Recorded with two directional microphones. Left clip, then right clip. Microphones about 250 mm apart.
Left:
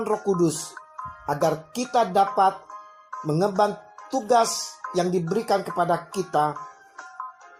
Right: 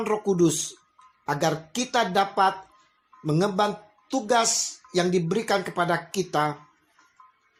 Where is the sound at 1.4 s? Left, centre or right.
Centre.